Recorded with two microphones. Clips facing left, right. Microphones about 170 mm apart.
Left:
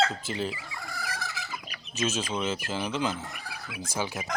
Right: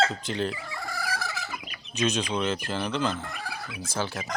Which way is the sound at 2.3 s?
5° left (ahead or behind).